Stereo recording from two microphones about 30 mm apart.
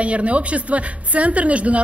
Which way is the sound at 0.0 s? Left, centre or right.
Right.